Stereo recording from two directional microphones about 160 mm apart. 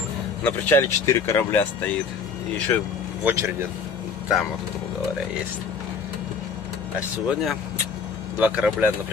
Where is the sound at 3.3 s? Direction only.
15° right (ahead or behind).